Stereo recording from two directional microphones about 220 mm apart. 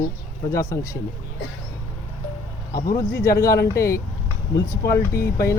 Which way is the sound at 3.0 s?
10° left (ahead or behind).